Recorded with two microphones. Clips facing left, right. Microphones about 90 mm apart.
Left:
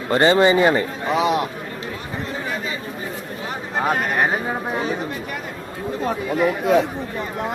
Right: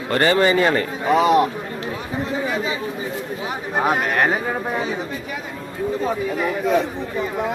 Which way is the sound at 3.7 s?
10° right (ahead or behind).